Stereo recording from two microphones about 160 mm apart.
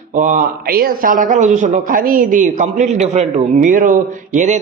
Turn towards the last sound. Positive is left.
turn(degrees=-50)  # may be behind; listen again after turning